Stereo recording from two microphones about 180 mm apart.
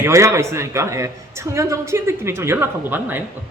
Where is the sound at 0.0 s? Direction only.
15° right (ahead or behind).